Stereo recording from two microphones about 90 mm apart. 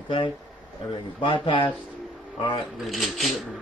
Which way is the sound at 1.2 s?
70° left (ahead or behind).